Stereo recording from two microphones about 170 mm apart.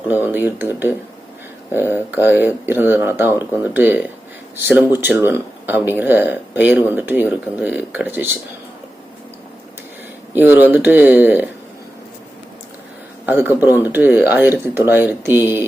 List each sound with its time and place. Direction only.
0.1 s speech: 10° right (ahead or behind)
10.3 s speech: 10° right (ahead or behind)
13.2 s speech: 10° right (ahead or behind)